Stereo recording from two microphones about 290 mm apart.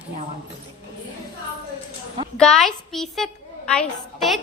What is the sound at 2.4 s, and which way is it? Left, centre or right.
Speech, centre.